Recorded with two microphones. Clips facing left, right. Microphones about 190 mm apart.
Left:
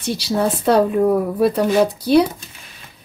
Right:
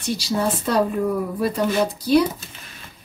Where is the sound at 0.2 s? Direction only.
60° left (ahead or behind).